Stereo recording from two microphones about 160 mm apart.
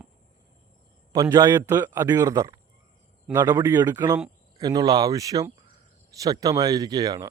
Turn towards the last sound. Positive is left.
turn(degrees=-25)  # may be behind; listen again after turning